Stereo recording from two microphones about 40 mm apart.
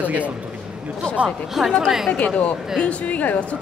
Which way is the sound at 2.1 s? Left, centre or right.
Left.